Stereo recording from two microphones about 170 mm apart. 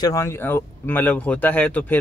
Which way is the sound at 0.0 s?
20° left (ahead or behind).